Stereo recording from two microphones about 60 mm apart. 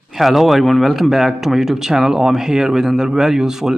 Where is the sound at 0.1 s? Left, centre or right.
Centre.